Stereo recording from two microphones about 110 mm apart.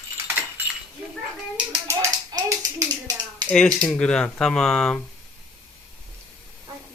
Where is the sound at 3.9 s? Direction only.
10° left (ahead or behind).